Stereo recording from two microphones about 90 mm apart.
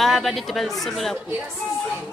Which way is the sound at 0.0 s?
Centre (ahead or behind).